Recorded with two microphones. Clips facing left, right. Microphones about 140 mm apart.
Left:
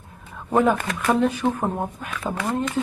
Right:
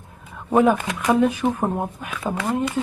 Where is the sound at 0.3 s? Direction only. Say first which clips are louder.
Right 2 dB; 10° right (ahead or behind).